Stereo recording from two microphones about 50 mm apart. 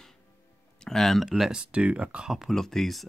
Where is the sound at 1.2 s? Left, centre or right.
Centre.